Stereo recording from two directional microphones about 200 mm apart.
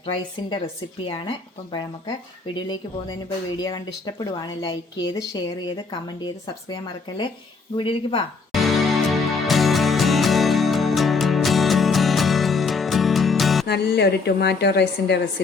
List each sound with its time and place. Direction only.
0.0 s speech: 25° left (ahead or behind)
7.8 s speech: 25° left (ahead or behind)
8.5 s music: centre (ahead or behind)
13.7 s a woman's voice: 55° left (ahead or behind)